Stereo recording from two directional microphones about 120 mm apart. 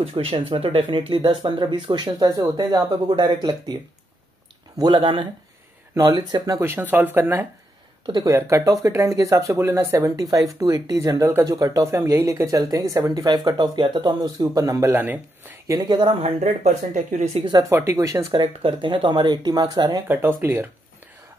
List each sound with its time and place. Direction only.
0.1 s speech: 50° right (ahead or behind)
4.7 s speech: 40° right (ahead or behind)
6.6 s speech: 15° right (ahead or behind)
15.7 s speech: 35° right (ahead or behind)
16.2 s speech: 60° right (ahead or behind); by 17.4 s 80° right
17.4 s speech: 40° right (ahead or behind)
17.6 s speech: 25° right (ahead or behind)
18.4 s speech: 45° right (ahead or behind)
20.1 s speech: 20° right (ahead or behind)